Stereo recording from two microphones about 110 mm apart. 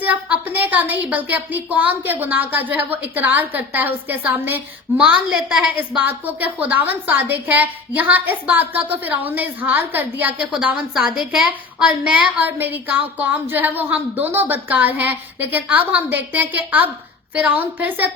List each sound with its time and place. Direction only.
0.0 s a woman's voice: 15° right (ahead or behind)